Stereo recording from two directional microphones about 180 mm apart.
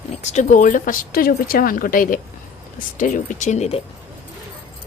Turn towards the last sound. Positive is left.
turn(degrees=35)  # may be behind; listen again after turning